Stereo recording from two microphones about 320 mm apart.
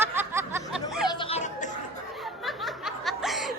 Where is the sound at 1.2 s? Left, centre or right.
Centre.